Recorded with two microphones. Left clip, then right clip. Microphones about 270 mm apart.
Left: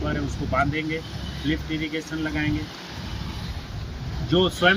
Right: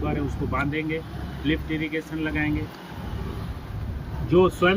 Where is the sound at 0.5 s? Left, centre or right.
Centre.